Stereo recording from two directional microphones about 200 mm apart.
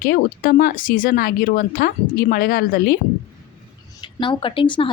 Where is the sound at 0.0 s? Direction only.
45° left (ahead or behind).